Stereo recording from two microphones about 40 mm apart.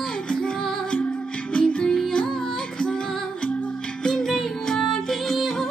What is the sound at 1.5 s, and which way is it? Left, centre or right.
Music, left.